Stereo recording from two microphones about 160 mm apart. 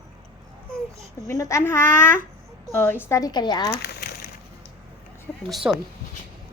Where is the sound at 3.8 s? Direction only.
75° left (ahead or behind).